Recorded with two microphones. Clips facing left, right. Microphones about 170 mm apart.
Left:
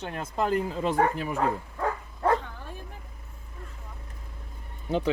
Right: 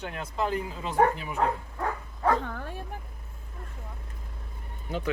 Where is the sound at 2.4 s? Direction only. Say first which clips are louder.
Right 7 dB; 60° right (ahead or behind).